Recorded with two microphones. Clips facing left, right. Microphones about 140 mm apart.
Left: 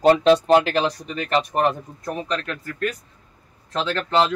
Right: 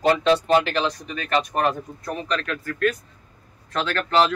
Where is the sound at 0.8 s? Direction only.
30° left (ahead or behind).